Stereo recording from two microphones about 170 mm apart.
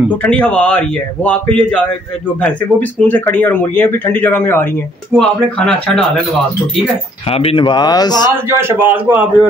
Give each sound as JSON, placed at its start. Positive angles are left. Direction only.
{"t": 0.2, "sound": "speech", "side_deg": 5}
{"t": 5.1, "sound": "speech", "side_deg": 5}
{"t": 7.2, "sound": "speech", "side_deg": 35}
{"t": 8.5, "sound": "a man's voice", "side_deg": -15}